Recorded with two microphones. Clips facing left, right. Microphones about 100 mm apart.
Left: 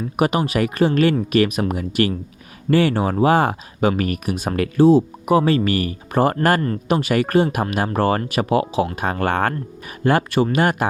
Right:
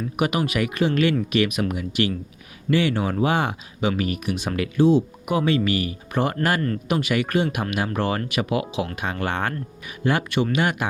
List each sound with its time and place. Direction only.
0.2 s speech: 35° left (ahead or behind)